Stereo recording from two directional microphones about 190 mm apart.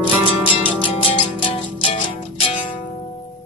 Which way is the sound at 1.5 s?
30° left (ahead or behind).